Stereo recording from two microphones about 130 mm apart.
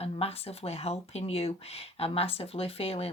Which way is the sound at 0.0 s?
50° left (ahead or behind).